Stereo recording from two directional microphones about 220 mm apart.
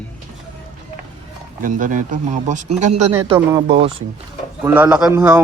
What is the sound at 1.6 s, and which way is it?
Speech, 35° right (ahead or behind).